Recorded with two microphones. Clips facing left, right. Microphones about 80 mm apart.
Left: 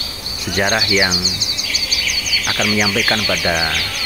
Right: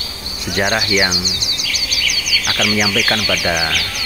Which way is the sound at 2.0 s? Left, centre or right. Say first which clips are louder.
Right 2 dB; left.